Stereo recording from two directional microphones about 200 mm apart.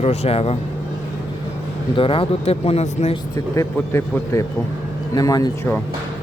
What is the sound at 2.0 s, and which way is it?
Speech, 25° left (ahead or behind).